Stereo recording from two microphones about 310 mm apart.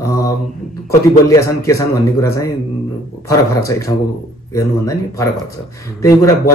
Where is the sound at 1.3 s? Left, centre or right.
Centre.